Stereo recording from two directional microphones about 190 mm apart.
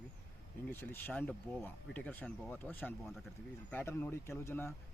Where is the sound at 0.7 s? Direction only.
10° left (ahead or behind).